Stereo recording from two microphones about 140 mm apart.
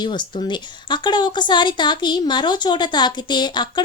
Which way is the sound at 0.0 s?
35° left (ahead or behind).